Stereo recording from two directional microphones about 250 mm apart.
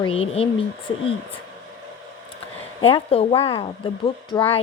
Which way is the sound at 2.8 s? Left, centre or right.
Left.